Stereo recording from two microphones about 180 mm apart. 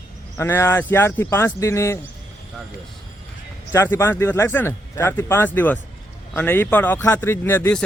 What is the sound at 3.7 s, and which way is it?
Speech, 15° left (ahead or behind).